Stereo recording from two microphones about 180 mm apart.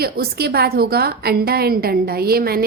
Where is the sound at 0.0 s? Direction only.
60° right (ahead or behind).